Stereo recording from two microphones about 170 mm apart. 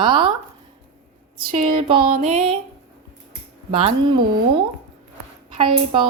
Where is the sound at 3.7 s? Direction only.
30° right (ahead or behind).